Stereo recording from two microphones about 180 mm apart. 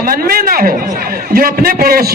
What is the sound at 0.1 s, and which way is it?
A man's voice, 55° right (ahead or behind).